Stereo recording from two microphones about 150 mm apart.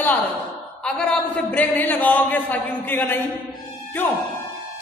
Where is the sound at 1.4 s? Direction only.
10° left (ahead or behind).